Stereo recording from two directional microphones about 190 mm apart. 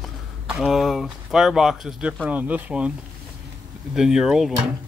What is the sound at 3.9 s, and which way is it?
Speech, 5° right (ahead or behind).